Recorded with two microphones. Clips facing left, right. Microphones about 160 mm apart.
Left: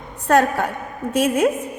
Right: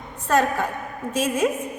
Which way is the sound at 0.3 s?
60° left (ahead or behind).